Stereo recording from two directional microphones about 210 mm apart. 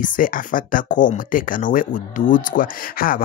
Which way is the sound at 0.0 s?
40° left (ahead or behind).